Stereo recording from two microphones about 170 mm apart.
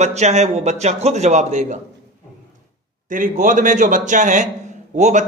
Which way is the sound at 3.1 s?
50° right (ahead or behind).